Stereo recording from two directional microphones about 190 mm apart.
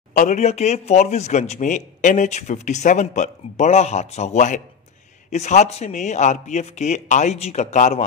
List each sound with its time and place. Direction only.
0.1 s speech: 40° left (ahead or behind)